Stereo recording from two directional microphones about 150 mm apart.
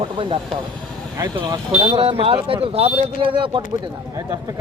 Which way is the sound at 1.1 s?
25° right (ahead or behind).